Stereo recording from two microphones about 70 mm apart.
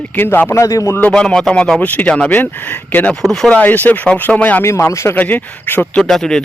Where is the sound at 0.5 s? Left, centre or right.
Left.